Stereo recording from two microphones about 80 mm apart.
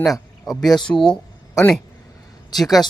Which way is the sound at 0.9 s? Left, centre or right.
Centre.